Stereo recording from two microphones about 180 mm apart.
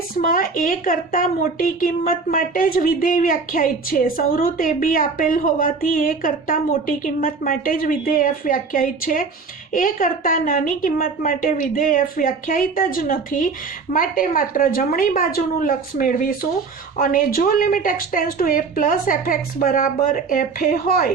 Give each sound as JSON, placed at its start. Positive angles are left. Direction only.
{"t": 0.2, "sound": "a woman's voice", "side_deg": 50}